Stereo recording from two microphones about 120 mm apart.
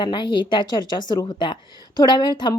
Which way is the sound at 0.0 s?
40° left (ahead or behind).